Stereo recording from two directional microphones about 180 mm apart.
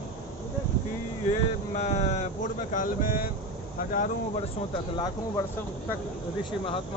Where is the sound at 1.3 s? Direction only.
35° left (ahead or behind).